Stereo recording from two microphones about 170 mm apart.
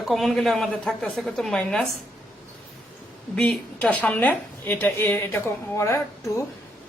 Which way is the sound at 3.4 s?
5° left (ahead or behind).